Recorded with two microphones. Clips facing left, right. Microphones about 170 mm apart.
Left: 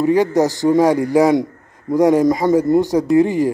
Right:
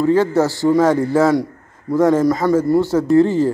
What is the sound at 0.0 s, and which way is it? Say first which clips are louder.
A man's voice: even; 15° left (ahead or behind).